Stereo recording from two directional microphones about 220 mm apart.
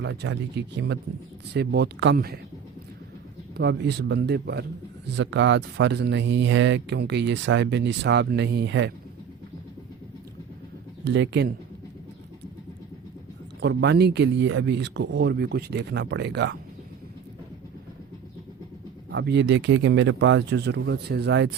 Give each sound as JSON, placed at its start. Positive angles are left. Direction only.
{"t": 0.0, "sound": "speech", "side_deg": -55}
{"t": 3.6, "sound": "speech", "side_deg": -50}
{"t": 11.0, "sound": "speech", "side_deg": -55}
{"t": 13.6, "sound": "speech", "side_deg": -50}
{"t": 19.1, "sound": "speech", "side_deg": -50}